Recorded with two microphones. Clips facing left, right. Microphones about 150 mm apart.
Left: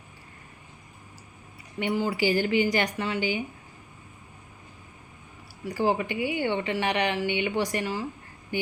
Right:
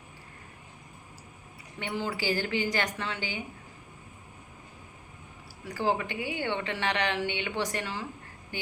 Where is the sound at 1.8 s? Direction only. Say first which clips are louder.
Left 6 dB; 15° left (ahead or behind).